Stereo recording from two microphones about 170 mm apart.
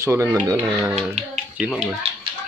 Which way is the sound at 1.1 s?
45° right (ahead or behind).